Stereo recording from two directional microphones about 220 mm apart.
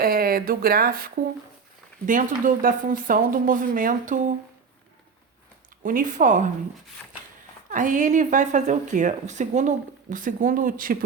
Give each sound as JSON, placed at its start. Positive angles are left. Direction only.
{"t": 0.0, "sound": "speech", "side_deg": -45}
{"t": 5.8, "sound": "speech", "side_deg": -40}
{"t": 7.7, "sound": "speech", "side_deg": -35}